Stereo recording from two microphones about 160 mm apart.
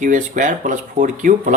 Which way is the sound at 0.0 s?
55° right (ahead or behind).